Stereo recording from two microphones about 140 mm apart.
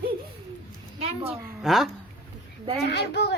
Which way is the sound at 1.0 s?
45° right (ahead or behind).